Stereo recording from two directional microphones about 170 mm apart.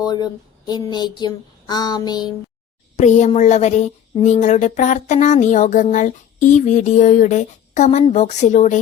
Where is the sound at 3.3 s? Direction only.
45° left (ahead or behind).